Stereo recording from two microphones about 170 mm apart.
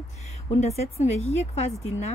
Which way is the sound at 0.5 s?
40° left (ahead or behind).